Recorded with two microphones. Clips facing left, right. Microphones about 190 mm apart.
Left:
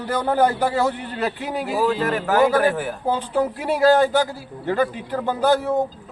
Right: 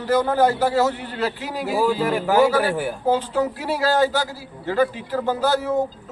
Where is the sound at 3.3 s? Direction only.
15° left (ahead or behind).